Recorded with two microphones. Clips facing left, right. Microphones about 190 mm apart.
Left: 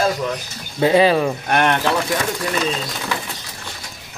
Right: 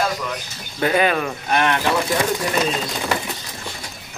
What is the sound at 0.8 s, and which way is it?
Speech, 25° left (ahead or behind).